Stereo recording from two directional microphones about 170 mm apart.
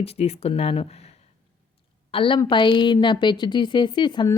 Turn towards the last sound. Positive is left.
turn(degrees=25)  # may be behind; listen again after turning